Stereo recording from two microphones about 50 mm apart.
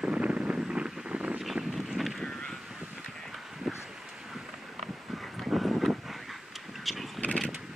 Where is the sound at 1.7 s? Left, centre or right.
Centre.